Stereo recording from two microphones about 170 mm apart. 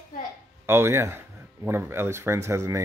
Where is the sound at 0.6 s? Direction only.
15° right (ahead or behind).